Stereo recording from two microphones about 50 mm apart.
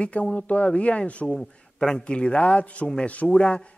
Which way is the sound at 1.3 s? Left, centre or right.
Centre.